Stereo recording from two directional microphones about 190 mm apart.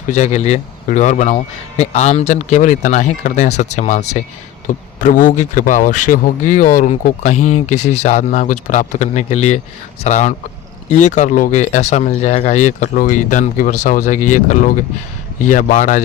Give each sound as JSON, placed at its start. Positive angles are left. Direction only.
{"t": 0.1, "sound": "a man's voice", "side_deg": 35}